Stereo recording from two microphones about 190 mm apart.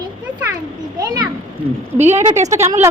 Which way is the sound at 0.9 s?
20° right (ahead or behind).